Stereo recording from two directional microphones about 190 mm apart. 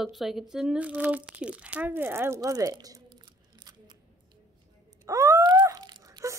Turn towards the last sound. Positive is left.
turn(degrees=-20)  # may be behind; listen again after turning